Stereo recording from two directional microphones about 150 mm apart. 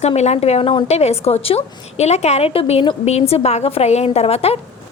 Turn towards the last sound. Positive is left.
turn(degrees=40)  # may be behind; listen again after turning